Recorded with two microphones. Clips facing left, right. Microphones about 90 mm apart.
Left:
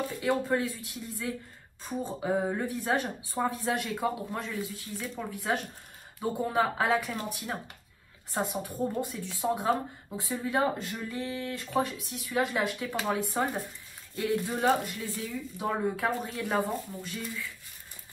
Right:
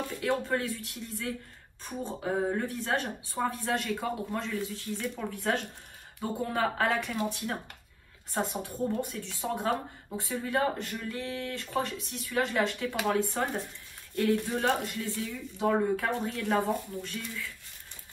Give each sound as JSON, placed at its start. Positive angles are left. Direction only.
{"t": 0.1, "sound": "speech", "side_deg": 15}
{"t": 8.3, "sound": "speech", "side_deg": 15}